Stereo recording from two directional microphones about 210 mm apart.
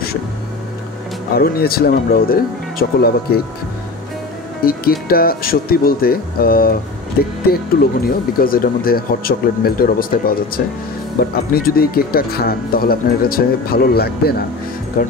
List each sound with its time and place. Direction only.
1.3 s speech: 45° left (ahead or behind)
4.6 s speech: 45° left (ahead or behind)